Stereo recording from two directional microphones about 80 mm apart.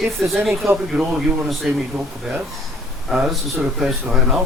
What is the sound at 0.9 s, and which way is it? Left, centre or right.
Speech, centre.